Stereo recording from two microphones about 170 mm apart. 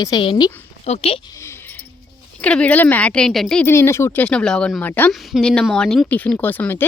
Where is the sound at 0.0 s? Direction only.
25° left (ahead or behind).